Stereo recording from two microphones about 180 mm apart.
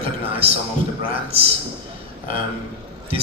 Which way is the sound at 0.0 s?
30° right (ahead or behind).